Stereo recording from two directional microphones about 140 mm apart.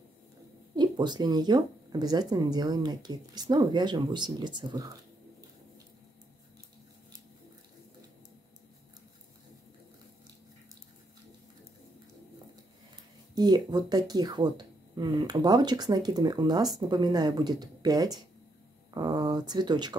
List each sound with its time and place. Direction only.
0.7 s speech: 30° right (ahead or behind)
13.3 s speech: 30° right (ahead or behind)